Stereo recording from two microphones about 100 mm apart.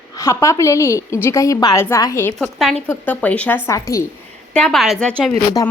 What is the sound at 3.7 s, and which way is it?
Speech, 30° left (ahead or behind).